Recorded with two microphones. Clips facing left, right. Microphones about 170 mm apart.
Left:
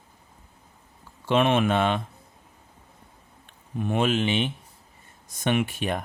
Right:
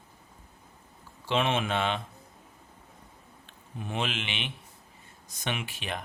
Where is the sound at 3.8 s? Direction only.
50° left (ahead or behind).